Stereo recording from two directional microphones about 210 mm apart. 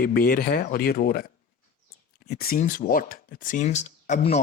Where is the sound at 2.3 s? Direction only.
45° left (ahead or behind).